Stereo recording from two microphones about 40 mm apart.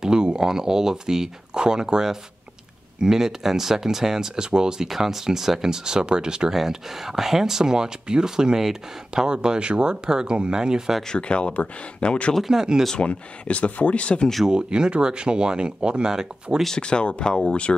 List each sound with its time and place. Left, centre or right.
0.0 s speech: centre
4.8 s speech: centre
6.5 s speech: centre
11.1 s speech: left
12.4 s speech: centre
12.9 s speech: left
14.4 s speech: right
16.7 s speech: left